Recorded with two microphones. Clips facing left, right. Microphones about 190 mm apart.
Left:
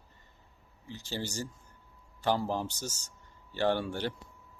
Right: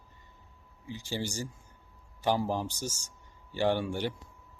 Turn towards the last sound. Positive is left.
turn(degrees=-10)  # may be behind; listen again after turning